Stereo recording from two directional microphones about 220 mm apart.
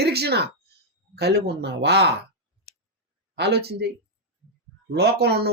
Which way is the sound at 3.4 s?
50° right (ahead or behind).